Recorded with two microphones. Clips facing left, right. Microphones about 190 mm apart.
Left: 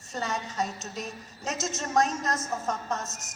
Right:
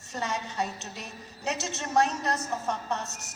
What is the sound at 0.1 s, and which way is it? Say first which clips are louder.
A woman's voice: even; 40° left (ahead or behind).